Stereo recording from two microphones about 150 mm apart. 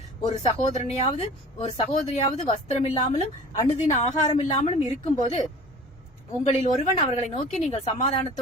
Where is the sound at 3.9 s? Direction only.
25° left (ahead or behind).